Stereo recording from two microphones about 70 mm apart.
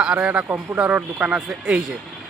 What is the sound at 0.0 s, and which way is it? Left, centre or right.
A man's voice, centre.